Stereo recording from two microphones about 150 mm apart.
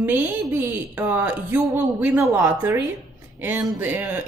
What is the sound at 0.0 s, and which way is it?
A woman's voice, 15° right (ahead or behind).